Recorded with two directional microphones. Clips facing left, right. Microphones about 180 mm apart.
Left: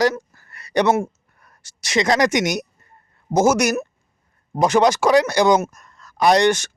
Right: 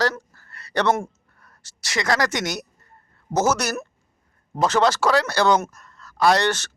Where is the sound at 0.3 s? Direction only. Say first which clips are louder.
Left 1 dB; 15° left (ahead or behind).